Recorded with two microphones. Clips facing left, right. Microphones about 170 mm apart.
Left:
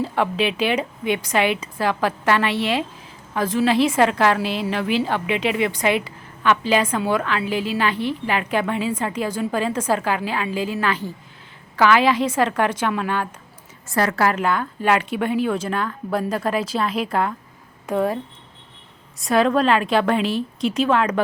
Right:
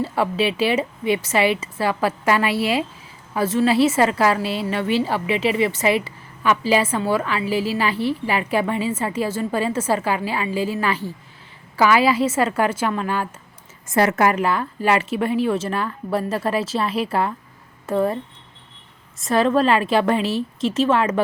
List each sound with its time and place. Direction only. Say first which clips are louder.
0.0 s a woman's voice: right 1 dB; 5° right (ahead or behind)
13.8 s a woman's voice: right 3 dB; 25° right (ahead or behind)
14.3 s speech: right 1 dB; 5° right (ahead or behind)
19.2 s speech: even; centre (ahead or behind)